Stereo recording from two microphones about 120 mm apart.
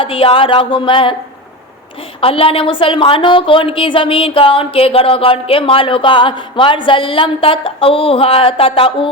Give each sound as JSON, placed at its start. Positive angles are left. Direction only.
{"t": 0.0, "sound": "a woman's voice", "side_deg": 50}
{"t": 2.2, "sound": "a woman's voice", "side_deg": 50}